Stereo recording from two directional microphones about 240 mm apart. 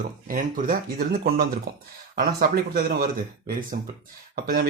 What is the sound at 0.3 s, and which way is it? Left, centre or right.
Speech, right.